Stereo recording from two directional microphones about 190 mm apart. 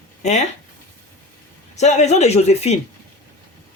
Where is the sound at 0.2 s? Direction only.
40° left (ahead or behind).